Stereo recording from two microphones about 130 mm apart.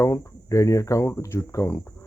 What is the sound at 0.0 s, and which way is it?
Speech, 25° left (ahead or behind).